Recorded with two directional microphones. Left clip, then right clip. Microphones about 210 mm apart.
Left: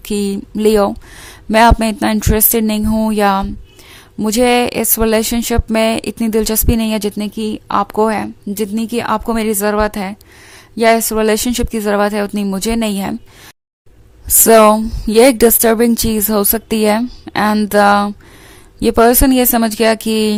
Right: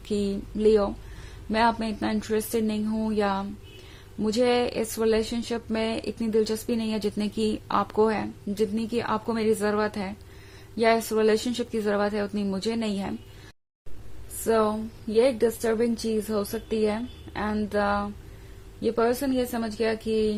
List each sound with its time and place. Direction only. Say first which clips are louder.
0.0 s speech: left 9 dB; 35° left (ahead or behind)
14.4 s a woman's voice: left 16 dB; 50° left (ahead or behind)